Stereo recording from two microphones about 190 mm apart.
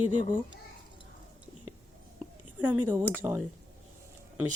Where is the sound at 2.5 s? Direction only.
10° right (ahead or behind).